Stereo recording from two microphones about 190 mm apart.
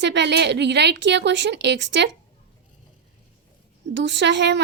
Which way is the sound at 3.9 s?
70° right (ahead or behind).